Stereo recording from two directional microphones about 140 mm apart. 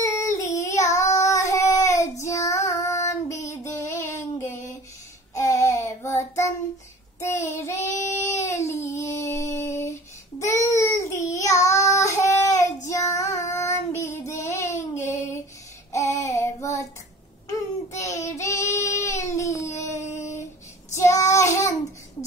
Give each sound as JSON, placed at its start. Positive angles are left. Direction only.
{"t": 0.0, "sound": "child singing", "side_deg": 20}
{"t": 4.5, "sound": "a sound", "side_deg": 20}
{"t": 5.3, "sound": "child singing", "side_deg": 20}
{"t": 18.0, "sound": "child singing", "side_deg": 20}